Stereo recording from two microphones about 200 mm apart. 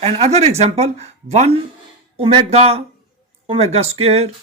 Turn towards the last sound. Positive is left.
turn(degrees=-30)  # may be behind; listen again after turning